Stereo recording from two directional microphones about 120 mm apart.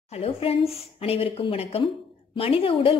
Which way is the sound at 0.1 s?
55° left (ahead or behind).